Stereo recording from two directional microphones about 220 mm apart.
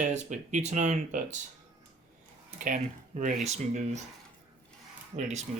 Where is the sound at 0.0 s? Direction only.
35° right (ahead or behind).